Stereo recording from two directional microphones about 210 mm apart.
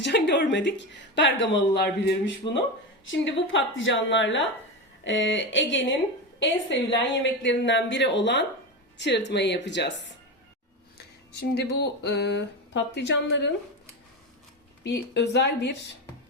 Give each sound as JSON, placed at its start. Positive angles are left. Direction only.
{"t": 0.0, "sound": "speech", "side_deg": 55}
{"t": 10.9, "sound": "speech", "side_deg": 50}
{"t": 14.8, "sound": "speech", "side_deg": 55}